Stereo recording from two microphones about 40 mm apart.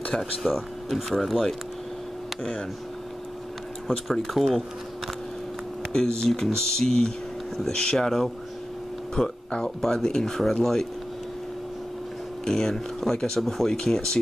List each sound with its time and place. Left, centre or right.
0.1 s speech: centre
3.8 s speech: centre
5.9 s speech: centre
9.2 s speech: centre
9.8 s speech: centre
12.4 s speech: centre